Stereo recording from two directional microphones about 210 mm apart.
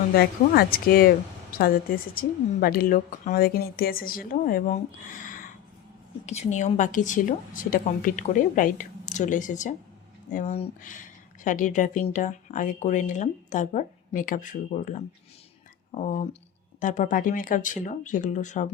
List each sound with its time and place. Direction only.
0.2 s speech: 45° left (ahead or behind)